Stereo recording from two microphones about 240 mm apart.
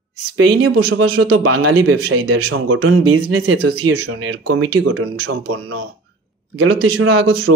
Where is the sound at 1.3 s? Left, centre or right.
Right.